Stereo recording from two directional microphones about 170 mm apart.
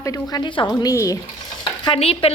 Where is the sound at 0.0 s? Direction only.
20° left (ahead or behind).